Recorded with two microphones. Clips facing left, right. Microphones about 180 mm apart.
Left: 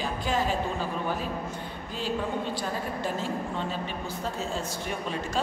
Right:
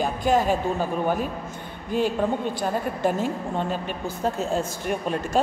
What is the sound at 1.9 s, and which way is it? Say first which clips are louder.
Speech: right 7 dB; 55° right (ahead or behind).